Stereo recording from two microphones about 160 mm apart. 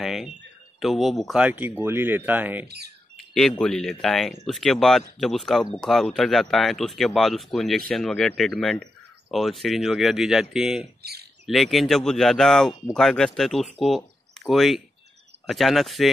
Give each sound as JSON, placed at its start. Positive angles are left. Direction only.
{"t": 0.0, "sound": "speech", "side_deg": 0}
{"t": 3.2, "sound": "speech", "side_deg": 5}
{"t": 11.0, "sound": "bird", "side_deg": -85}
{"t": 11.4, "sound": "speech", "side_deg": 0}